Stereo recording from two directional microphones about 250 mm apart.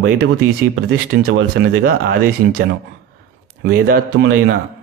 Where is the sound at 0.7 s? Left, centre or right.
Right.